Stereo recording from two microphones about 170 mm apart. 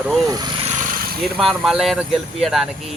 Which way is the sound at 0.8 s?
55° right (ahead or behind).